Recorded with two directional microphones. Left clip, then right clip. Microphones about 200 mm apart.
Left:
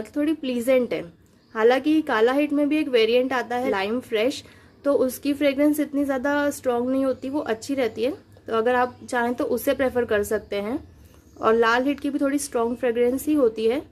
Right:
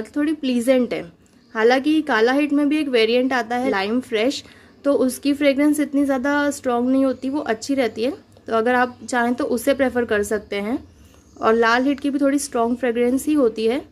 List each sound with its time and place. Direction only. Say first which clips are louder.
0.0 s a woman's voice: right 2 dB; centre (ahead or behind)